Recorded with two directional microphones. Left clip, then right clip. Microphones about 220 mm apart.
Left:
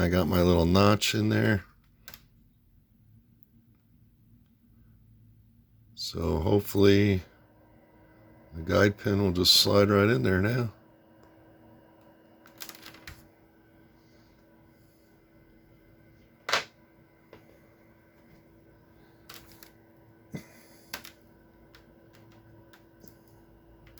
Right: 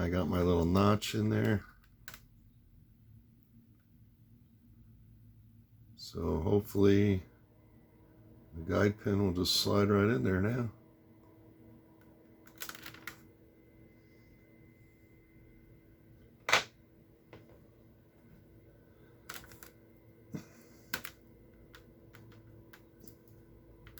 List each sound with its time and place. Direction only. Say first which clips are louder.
0.0 s speech: left 7 dB; 45° left (ahead or behind)
5.9 s speech: left 6 dB; 40° left (ahead or behind)
8.6 s speech: left 7 dB; 40° left (ahead or behind)
20.3 s finger snapping: left 3 dB; 30° left (ahead or behind)